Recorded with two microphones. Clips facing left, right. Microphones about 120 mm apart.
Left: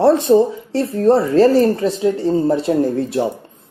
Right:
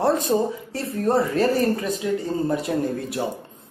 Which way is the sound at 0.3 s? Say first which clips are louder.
Left 9 dB; 30° left (ahead or behind).